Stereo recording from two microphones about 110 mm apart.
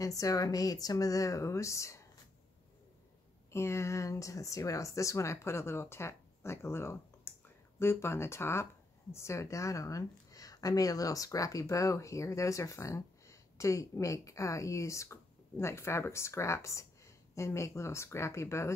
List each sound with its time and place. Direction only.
0.0 s speech: 30° left (ahead or behind)
3.5 s speech: 25° left (ahead or behind)